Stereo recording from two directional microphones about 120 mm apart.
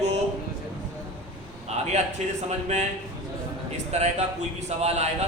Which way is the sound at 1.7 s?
65° right (ahead or behind).